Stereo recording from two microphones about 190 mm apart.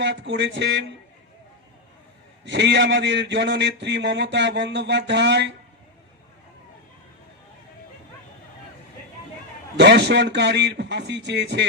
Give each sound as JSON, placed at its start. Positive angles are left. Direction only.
{"t": 0.0, "sound": "a man's voice", "side_deg": -70}
{"t": 2.4, "sound": "a man's voice", "side_deg": -70}
{"t": 9.7, "sound": "a man's voice", "side_deg": -65}